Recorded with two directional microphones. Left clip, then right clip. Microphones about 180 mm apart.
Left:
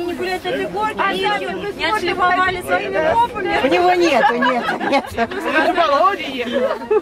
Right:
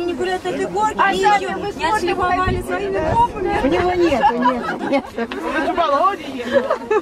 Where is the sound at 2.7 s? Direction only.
20° left (ahead or behind).